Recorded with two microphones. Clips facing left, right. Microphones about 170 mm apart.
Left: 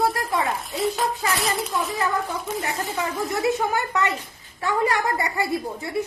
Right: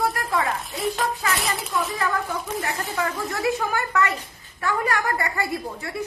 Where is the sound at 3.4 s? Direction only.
20° left (ahead or behind).